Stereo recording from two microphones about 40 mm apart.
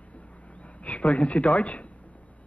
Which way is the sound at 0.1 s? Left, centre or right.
Left.